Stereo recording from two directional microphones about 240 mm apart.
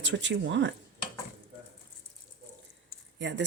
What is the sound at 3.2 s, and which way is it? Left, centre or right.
Speech, right.